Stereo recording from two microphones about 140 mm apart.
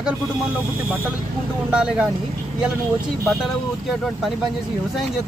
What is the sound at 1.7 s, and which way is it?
Speech, 10° right (ahead or behind).